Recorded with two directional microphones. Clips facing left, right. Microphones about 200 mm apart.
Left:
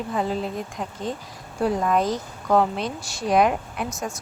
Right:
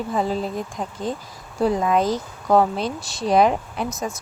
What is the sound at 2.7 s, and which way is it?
Speech, 35° right (ahead or behind).